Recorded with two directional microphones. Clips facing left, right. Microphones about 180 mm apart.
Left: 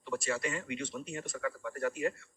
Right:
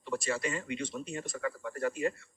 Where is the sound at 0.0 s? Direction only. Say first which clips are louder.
Right 1 dB; 35° right (ahead or behind).